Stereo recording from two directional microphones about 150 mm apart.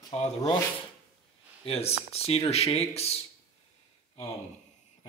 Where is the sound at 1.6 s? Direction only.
40° left (ahead or behind).